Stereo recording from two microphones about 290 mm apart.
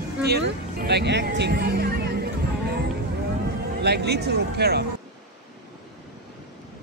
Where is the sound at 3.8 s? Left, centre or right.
Right.